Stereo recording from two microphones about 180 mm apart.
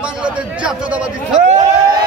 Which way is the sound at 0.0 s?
5° right (ahead or behind).